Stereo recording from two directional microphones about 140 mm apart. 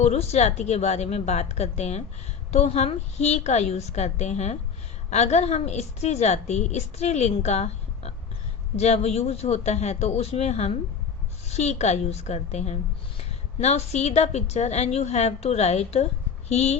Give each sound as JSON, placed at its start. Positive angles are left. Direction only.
{"t": 0.0, "sound": "a woman's voice", "side_deg": 50}